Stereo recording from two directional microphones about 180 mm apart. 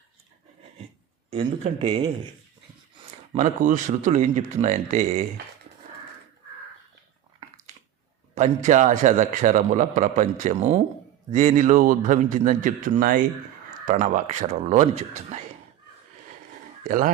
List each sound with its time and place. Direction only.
1.3 s a man's voice: 35° right (ahead or behind)
3.3 s speech: 45° right (ahead or behind)
8.4 s a man's voice: 40° right (ahead or behind)
16.8 s speech: 50° right (ahead or behind)